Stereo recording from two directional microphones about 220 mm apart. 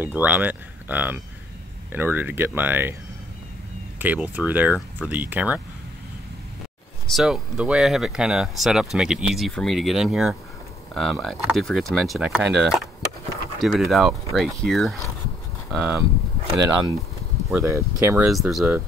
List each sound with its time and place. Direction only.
0.0 s speech: 5° right (ahead or behind)
4.0 s speech: 5° right (ahead or behind)
7.1 s speech: centre (ahead or behind)
17.5 s speech: 10° right (ahead or behind)